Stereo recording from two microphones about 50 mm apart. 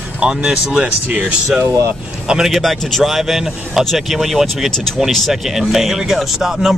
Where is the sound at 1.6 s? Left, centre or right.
Right.